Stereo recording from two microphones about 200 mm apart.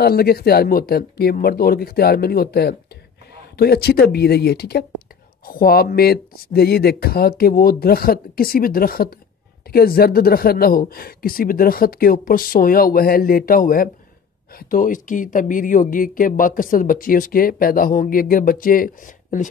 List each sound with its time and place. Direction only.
0.0 s speech: 50° left (ahead or behind)